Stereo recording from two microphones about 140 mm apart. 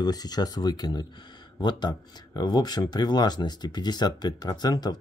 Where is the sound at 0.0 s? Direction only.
30° left (ahead or behind).